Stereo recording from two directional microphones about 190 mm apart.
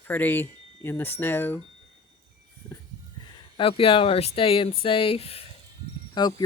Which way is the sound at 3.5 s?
30° left (ahead or behind).